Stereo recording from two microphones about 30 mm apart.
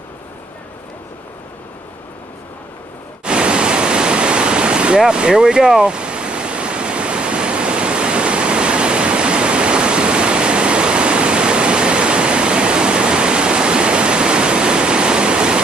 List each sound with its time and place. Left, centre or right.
3.3 s pink noise: right
5.8 s ocean: right